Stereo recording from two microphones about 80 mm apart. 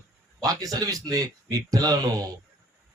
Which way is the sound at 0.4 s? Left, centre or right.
Right.